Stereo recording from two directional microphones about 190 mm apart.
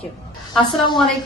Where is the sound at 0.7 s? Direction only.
25° left (ahead or behind).